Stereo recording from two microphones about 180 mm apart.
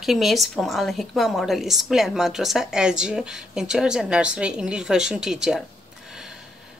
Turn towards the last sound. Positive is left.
turn(degrees=-5)  # may be behind; listen again after turning